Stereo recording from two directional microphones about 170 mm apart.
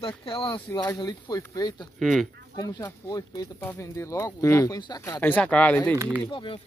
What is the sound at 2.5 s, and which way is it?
Speech, 20° left (ahead or behind).